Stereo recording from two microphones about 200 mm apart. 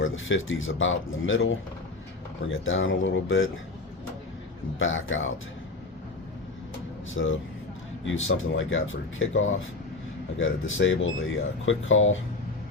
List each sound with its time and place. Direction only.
0.0 s speech: 75° left (ahead or behind)
4.8 s speech: 75° left (ahead or behind)
7.1 s speech: 75° left (ahead or behind)